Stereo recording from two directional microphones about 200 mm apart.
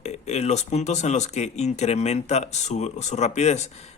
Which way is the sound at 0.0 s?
35° left (ahead or behind).